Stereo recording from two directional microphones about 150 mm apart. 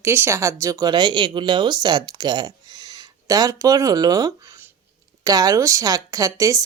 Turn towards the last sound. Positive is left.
turn(degrees=-20)  # may be behind; listen again after turning